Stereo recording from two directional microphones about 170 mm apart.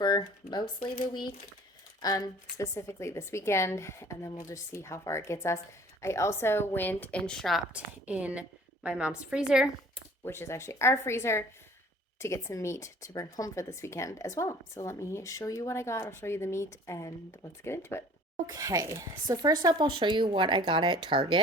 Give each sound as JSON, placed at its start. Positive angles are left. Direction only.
{"t": 0.0, "sound": "a woman's voice", "side_deg": 25}
{"t": 10.2, "sound": "speech", "side_deg": 15}
{"t": 18.4, "sound": "speech", "side_deg": -20}